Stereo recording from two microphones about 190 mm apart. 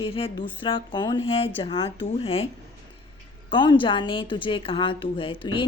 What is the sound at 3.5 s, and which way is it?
A woman's voice, 25° left (ahead or behind).